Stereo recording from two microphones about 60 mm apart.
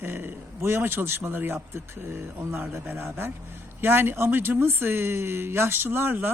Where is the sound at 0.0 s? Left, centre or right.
Right.